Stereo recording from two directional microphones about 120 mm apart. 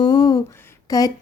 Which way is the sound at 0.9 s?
30° left (ahead or behind).